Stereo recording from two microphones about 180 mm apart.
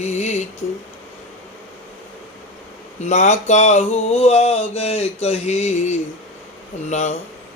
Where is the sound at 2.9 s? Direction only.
40° left (ahead or behind).